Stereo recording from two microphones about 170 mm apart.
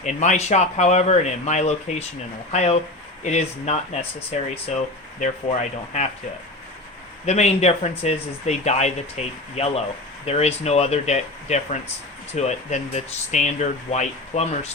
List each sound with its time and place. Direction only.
0.0 s speech: 45° left (ahead or behind)
5.2 s speech: 45° left (ahead or behind)
7.3 s speech: 40° left (ahead or behind)